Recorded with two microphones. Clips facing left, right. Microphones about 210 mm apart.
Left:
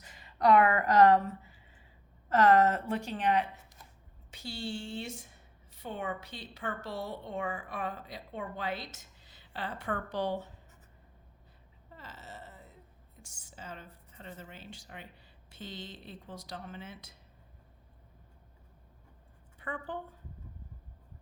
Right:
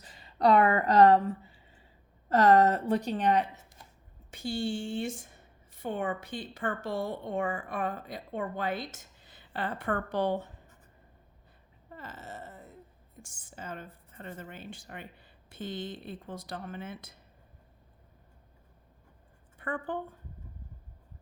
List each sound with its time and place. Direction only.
0.0 s a woman's voice: 35° right (ahead or behind)
4.3 s a woman's voice: 50° right (ahead or behind)
11.9 s a sound: 50° right (ahead or behind)
13.2 s a woman's voice: 50° right (ahead or behind)
19.5 s a woman's voice: 55° right (ahead or behind)